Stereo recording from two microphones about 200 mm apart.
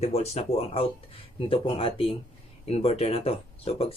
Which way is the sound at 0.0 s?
30° left (ahead or behind).